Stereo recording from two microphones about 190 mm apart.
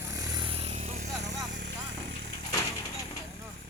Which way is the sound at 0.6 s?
35° right (ahead or behind).